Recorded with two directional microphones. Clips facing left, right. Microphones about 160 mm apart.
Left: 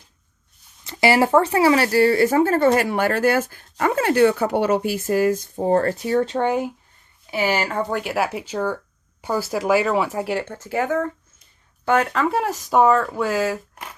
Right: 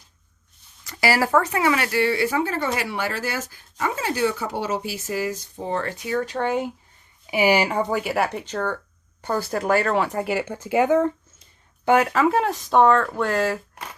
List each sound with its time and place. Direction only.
0.9 s speech: 25° left (ahead or behind)
6.3 s speech: 15° left (ahead or behind)
7.3 s speech: 15° right (ahead or behind)
7.8 s speech: 5° right (ahead or behind)
10.4 s speech: 15° right (ahead or behind)
11.9 s speech: 10° right (ahead or behind)